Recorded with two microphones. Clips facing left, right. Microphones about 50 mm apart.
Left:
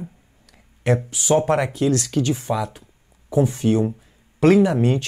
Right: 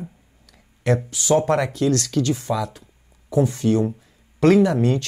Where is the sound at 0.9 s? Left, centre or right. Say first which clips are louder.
Even; centre.